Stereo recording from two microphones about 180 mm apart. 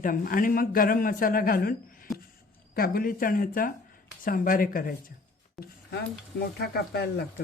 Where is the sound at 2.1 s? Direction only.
Centre (ahead or behind).